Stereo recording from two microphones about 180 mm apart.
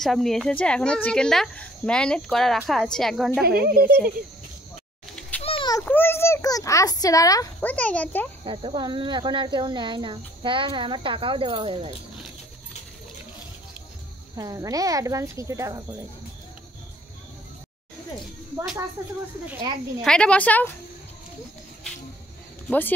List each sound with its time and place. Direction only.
0.0 s speech: centre (ahead or behind)
3.4 s speech: 55° right (ahead or behind)
5.4 s a sound: 30° left (ahead or behind)
5.9 s a child's voice: 10° left (ahead or behind)
7.6 s a woman's voice: 5° left (ahead or behind)
8.5 s speech: 25° right (ahead or behind)
14.3 s speech: 20° right (ahead or behind)
20.0 s a woman's voice: 5° left (ahead or behind)
22.7 s a woman's voice: 10° left (ahead or behind)